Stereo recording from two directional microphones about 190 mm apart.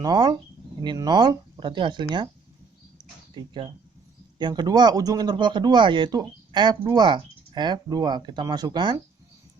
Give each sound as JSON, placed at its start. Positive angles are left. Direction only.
{"t": 0.0, "sound": "speech", "side_deg": -20}
{"t": 3.3, "sound": "speech", "side_deg": -25}